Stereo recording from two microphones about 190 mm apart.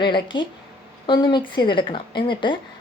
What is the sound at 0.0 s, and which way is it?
Speech, 25° left (ahead or behind).